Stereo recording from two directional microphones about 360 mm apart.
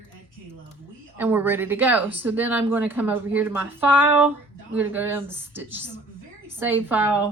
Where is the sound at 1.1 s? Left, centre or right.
Centre.